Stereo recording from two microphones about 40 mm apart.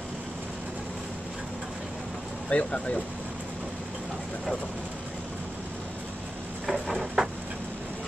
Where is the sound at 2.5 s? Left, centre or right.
Left.